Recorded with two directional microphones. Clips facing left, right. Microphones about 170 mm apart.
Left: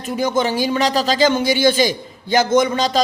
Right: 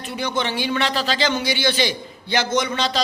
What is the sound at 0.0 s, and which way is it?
A man's voice, 45° left (ahead or behind).